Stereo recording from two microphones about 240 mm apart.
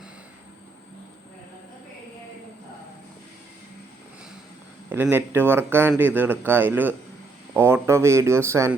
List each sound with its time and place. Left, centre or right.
4.9 s speech: centre